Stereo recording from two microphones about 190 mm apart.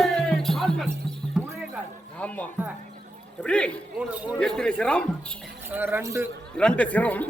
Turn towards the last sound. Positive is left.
turn(degrees=10)  # may be behind; listen again after turning